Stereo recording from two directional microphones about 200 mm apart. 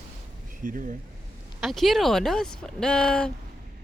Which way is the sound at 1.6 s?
Centre (ahead or behind).